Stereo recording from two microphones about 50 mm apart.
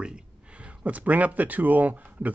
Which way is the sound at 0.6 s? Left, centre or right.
Right.